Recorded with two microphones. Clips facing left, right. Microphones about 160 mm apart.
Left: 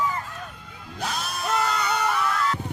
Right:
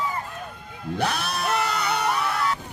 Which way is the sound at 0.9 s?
65° right (ahead or behind).